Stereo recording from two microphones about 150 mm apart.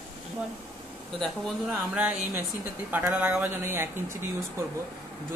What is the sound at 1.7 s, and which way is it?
Speech, 10° right (ahead or behind).